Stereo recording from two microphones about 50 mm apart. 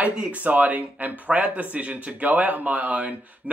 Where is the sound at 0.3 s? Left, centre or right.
Right.